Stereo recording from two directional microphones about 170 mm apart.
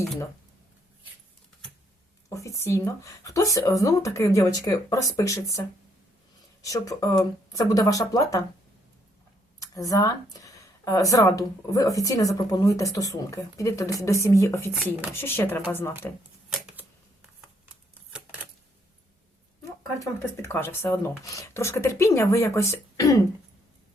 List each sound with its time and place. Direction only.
2.3 s speech: 20° left (ahead or behind)
9.6 s speech: 20° left (ahead or behind)
20.0 s speech: 15° left (ahead or behind)